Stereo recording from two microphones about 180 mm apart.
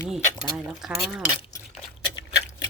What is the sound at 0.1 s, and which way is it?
Speech, centre (ahead or behind).